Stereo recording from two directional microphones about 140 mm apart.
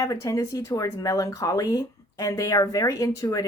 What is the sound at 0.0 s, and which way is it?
Speech, 25° left (ahead or behind).